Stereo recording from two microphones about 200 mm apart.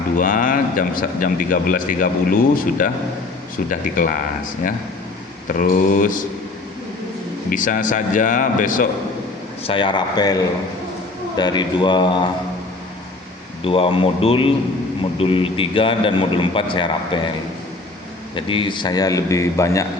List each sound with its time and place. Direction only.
0.2 s speech: 40° left (ahead or behind)
5.5 s speech: 40° left (ahead or behind)
7.5 s speech: 40° left (ahead or behind)
9.6 s a man's voice: 25° left (ahead or behind)
13.7 s a man's voice: 30° left (ahead or behind)
18.3 s a man's voice: 25° left (ahead or behind)